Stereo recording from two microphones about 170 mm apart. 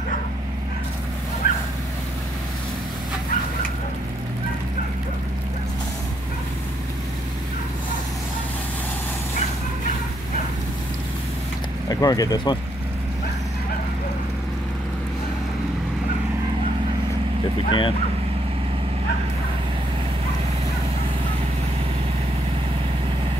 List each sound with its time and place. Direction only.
1.4 s a sound: 55° left (ahead or behind)
11.9 s speech: 20° left (ahead or behind)
17.6 s speech: 30° left (ahead or behind)